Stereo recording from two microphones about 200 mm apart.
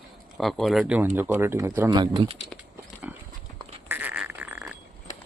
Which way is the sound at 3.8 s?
10° right (ahead or behind).